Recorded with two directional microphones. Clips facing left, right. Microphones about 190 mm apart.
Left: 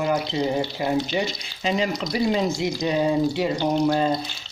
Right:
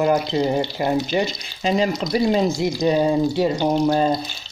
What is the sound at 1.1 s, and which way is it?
Speech, 40° right (ahead or behind).